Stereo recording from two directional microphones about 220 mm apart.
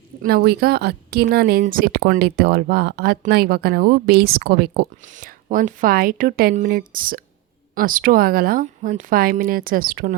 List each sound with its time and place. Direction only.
0.2 s speech: 45° right (ahead or behind)